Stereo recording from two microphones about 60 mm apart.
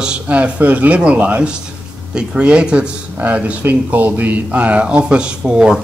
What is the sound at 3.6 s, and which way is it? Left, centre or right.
Speech, right.